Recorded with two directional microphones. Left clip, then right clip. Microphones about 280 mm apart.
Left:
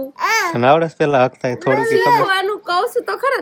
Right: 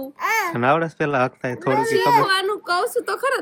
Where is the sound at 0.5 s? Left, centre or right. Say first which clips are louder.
Left 6 dB; centre.